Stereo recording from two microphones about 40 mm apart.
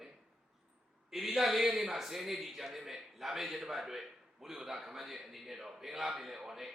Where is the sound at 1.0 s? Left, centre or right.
Centre.